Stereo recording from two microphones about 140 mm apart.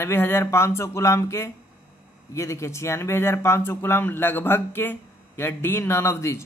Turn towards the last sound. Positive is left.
turn(degrees=20)  # may be behind; listen again after turning